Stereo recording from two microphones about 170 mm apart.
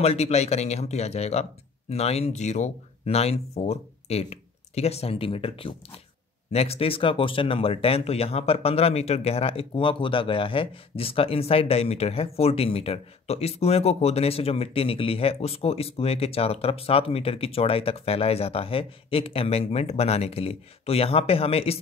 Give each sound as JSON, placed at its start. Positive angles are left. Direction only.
{"t": 0.0, "sound": "speech", "side_deg": 40}